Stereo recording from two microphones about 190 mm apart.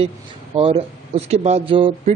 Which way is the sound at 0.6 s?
30° right (ahead or behind).